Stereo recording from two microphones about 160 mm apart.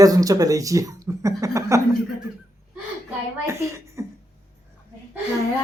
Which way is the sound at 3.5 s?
20° right (ahead or behind).